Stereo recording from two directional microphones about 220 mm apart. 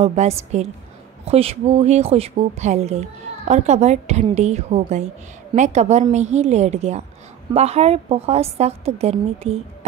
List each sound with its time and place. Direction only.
0.0 s a woman's voice: 30° right (ahead or behind)